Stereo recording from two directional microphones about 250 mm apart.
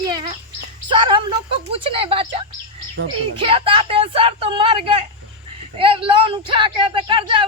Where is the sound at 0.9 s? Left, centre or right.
Centre.